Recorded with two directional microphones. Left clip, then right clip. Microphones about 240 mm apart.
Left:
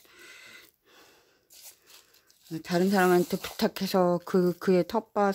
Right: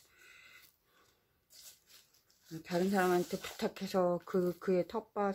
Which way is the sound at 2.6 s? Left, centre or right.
Left.